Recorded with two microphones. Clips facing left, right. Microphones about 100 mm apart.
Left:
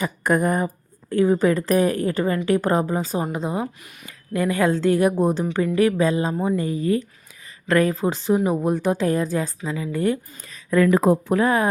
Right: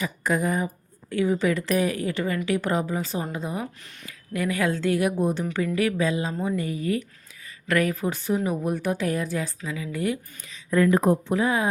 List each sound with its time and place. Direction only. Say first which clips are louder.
0.0 s a woman's voice: left 5 dB; 55° left (ahead or behind); by 3.0 s 40° left (ahead or behind)
3.3 s a woman's voice: left 5 dB; 25° left (ahead or behind)
6.4 s a woman's voice: left 4 dB; 25° left (ahead or behind); by 10.6 s 45° left (ahead or behind)
10.7 s speech: left 3 dB; 90° left
11.3 s speech: left 4 dB; 55° left (ahead or behind)